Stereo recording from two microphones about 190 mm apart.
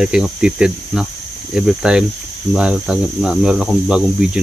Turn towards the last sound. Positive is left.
turn(degrees=-5)  # may be behind; listen again after turning